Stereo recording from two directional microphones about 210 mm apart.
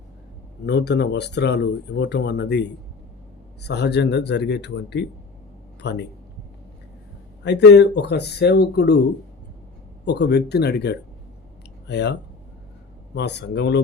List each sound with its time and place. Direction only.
0.6 s speech: 55° left (ahead or behind)
7.4 s speech: 55° left (ahead or behind)
10.1 s speech: 50° left (ahead or behind)
13.1 s speech: 55° left (ahead or behind)